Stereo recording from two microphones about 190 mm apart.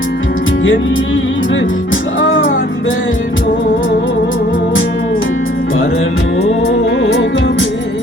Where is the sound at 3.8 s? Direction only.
80° left.